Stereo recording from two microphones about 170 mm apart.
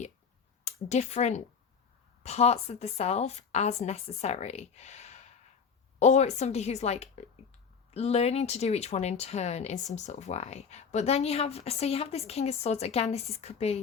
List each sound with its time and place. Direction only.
0.6 s speech: 40° left (ahead or behind)